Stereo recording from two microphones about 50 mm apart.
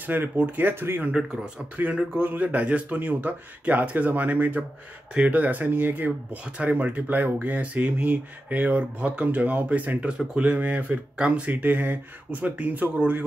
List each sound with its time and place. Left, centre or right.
0.0 s speech: right
1.1 s speech: centre
1.8 s speech: right
11.5 s speech: right